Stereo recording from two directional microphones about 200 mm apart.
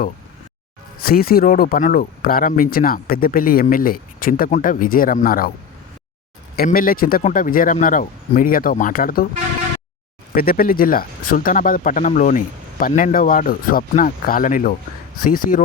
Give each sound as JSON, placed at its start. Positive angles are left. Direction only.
{"t": 0.9, "sound": "speech", "side_deg": 50}
{"t": 6.6, "sound": "speech", "side_deg": 45}
{"t": 10.3, "sound": "speech", "side_deg": 45}